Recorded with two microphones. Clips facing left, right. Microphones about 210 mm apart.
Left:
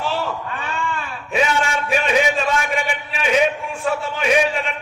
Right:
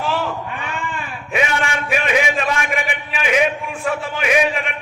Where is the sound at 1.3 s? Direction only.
30° left (ahead or behind).